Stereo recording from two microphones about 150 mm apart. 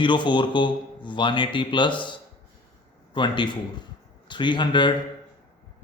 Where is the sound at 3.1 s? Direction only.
30° left (ahead or behind).